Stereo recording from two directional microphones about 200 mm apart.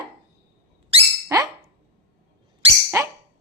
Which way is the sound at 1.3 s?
15° right (ahead or behind).